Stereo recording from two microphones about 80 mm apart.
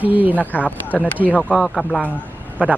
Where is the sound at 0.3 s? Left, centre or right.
Centre.